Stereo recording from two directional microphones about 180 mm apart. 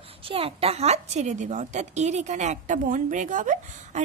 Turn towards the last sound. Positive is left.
turn(degrees=-45)  # may be behind; listen again after turning